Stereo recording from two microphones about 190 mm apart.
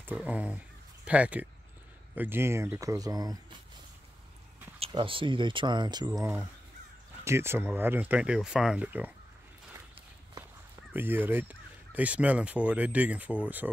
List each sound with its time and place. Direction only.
0.0 s speech: 5° right (ahead or behind)
4.7 s speech: 30° right (ahead or behind); by 9.1 s 10° right (ahead or behind)
10.9 s speech: 10° right (ahead or behind)